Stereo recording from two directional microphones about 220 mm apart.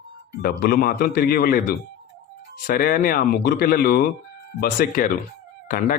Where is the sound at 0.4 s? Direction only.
45° left (ahead or behind).